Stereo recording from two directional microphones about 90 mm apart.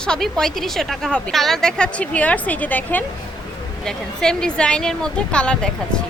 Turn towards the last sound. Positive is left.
turn(degrees=10)  # may be behind; listen again after turning